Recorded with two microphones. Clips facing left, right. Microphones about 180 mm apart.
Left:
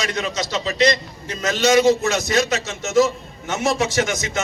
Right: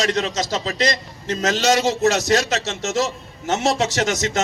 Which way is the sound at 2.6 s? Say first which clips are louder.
Right 3 dB; 80° right.